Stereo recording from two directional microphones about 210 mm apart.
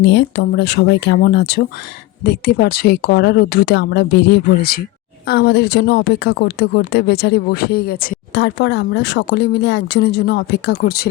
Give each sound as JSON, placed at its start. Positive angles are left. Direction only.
{"t": 0.1, "sound": "speech", "side_deg": 55}